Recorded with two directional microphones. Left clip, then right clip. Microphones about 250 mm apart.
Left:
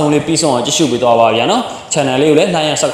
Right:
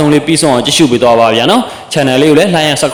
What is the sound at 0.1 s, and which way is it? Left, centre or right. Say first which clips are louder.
A man's voice: right 4 dB; right.